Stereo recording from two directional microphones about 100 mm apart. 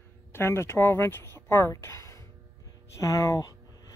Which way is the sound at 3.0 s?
35° left (ahead or behind).